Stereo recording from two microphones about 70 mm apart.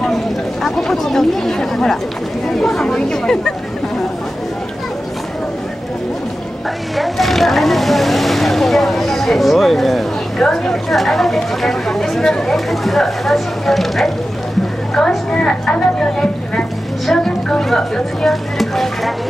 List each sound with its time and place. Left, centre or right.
0.0 s a woman's voice: centre
7.0 s a woman's voice: centre